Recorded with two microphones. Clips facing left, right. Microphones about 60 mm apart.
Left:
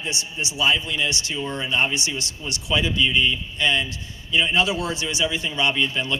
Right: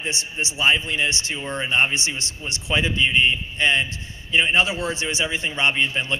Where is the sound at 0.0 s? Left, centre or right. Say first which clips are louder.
Right 1 dB; right.